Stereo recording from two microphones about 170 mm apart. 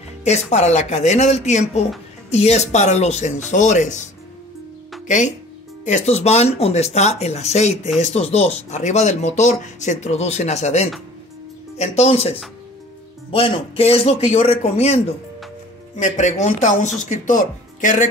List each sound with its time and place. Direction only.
0.2 s speech: 40° left (ahead or behind)